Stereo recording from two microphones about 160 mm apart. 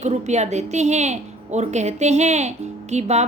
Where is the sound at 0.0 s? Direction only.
45° right (ahead or behind).